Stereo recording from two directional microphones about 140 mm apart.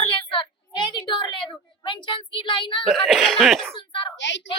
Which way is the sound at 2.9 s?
Centre (ahead or behind).